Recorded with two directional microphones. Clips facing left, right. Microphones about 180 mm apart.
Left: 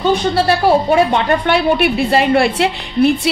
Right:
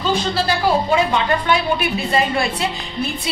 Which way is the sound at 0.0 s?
65° left (ahead or behind).